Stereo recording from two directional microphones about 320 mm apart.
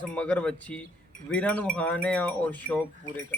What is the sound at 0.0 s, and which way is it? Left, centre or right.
A man's voice, centre.